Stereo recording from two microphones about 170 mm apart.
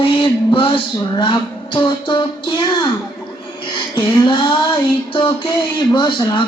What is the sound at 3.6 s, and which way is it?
Music, 30° left (ahead or behind).